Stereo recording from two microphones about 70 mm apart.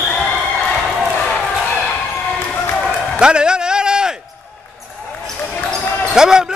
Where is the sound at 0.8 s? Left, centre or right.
Centre.